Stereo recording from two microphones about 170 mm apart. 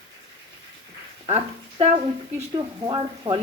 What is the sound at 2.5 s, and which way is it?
Speech, 25° right (ahead or behind).